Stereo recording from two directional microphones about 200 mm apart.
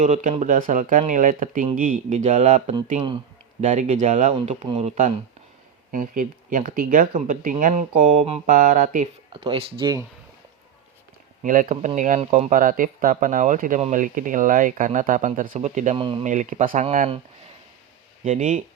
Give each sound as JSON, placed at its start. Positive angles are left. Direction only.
{"t": 0.0, "sound": "speech", "side_deg": -35}
{"t": 9.3, "sound": "speech", "side_deg": -25}
{"t": 11.4, "sound": "speech", "side_deg": -40}
{"t": 16.0, "sound": "speech", "side_deg": -25}
{"t": 16.2, "sound": "speech", "side_deg": -40}
{"t": 18.3, "sound": "speech", "side_deg": -40}